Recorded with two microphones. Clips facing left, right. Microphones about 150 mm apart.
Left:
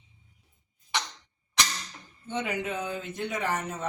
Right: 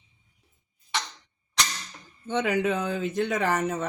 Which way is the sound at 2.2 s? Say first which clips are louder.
Right 7 dB; 90° right.